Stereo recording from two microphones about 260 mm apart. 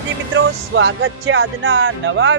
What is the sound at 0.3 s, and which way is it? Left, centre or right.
Speech, right.